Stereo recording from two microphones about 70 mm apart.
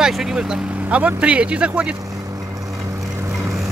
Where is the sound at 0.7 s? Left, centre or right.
Right.